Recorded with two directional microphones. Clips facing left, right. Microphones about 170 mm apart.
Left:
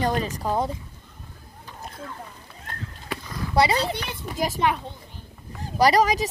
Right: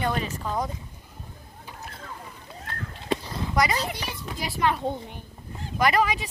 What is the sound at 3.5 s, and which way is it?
Speech, 30° left (ahead or behind).